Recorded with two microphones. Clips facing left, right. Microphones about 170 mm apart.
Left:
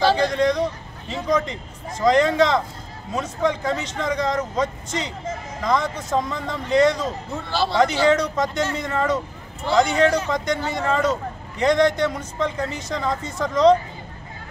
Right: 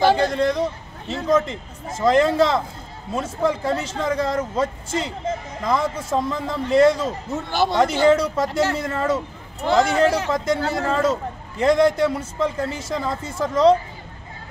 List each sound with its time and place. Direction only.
0.2 s a man's voice: 5° right (ahead or behind)
7.3 s speech: 20° right (ahead or behind)
8.1 s a man's voice: 5° right (ahead or behind)